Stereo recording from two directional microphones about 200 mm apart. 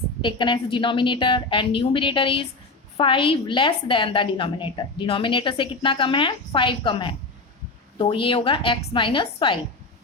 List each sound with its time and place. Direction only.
0.2 s a woman's voice: 25° left (ahead or behind)